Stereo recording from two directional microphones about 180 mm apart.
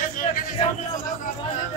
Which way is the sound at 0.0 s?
45° left (ahead or behind).